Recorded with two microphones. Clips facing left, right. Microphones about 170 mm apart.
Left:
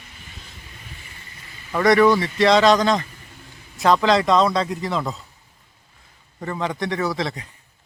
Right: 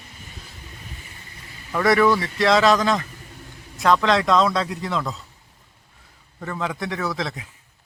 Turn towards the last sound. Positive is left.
turn(degrees=0)  # may be behind; listen again after turning